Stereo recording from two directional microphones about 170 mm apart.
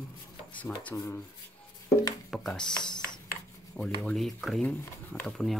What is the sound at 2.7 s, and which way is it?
Speech, 25° left (ahead or behind).